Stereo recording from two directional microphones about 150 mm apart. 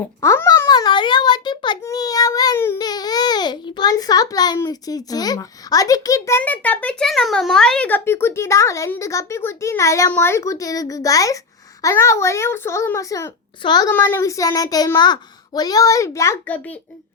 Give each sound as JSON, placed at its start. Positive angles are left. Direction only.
{"t": 0.2, "sound": "a child's voice", "side_deg": 20}
{"t": 13.9, "sound": "a child's voice", "side_deg": 15}